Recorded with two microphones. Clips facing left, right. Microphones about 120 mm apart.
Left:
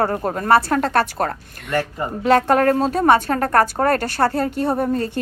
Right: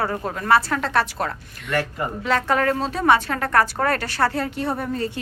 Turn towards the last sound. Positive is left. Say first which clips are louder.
# left 5 dB
turn(degrees=45)  # may be behind; listen again after turning